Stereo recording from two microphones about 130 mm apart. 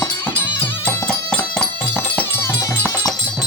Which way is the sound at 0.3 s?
15° left (ahead or behind).